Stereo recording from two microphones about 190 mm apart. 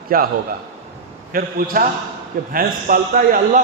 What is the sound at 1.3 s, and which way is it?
A man's voice, 50° right (ahead or behind).